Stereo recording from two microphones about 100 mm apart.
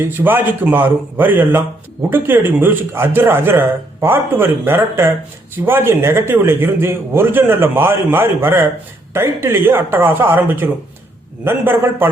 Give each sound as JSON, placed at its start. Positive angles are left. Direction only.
{"t": 0.0, "sound": "speech", "side_deg": -20}